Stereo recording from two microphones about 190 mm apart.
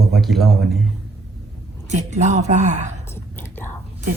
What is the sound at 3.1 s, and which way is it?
Whispering, 10° left (ahead or behind).